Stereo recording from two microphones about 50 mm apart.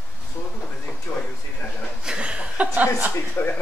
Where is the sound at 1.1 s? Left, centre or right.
Left.